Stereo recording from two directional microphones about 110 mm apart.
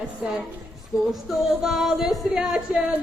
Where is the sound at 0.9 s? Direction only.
30° left (ahead or behind).